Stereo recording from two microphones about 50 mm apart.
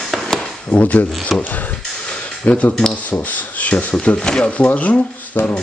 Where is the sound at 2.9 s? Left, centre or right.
Left.